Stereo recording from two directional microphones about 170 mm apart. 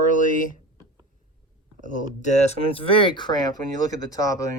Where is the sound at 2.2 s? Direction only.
40° left (ahead or behind).